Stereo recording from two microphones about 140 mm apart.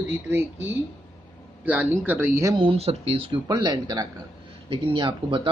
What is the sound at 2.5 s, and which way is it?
Speech, 45° right (ahead or behind).